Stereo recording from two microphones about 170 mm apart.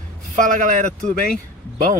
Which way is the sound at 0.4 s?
50° right (ahead or behind).